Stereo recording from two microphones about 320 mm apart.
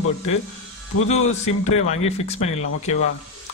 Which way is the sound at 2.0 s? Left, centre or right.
Centre.